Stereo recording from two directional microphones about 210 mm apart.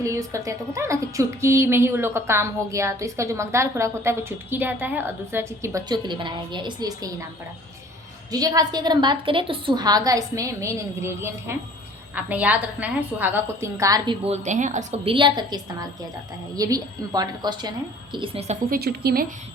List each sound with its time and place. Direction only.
0.0 s a woman's voice: 15° right (ahead or behind)
8.3 s a woman's voice: 15° right (ahead or behind)
14.3 s a woman's voice: 35° right (ahead or behind)
18.7 s a woman's voice: 45° right (ahead or behind)